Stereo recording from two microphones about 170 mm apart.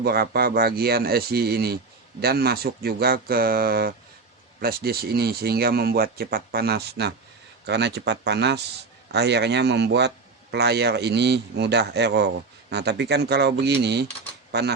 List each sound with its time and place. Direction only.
0.0 s a man's voice: 65° right (ahead or behind)